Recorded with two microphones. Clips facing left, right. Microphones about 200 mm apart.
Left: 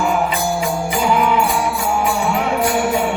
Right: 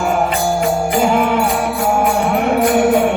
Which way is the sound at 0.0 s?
50° right (ahead or behind).